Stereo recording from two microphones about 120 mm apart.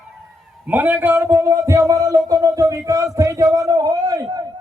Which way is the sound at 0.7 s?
15° right (ahead or behind).